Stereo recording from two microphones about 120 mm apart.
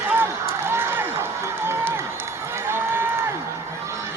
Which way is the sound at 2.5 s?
20° right (ahead or behind).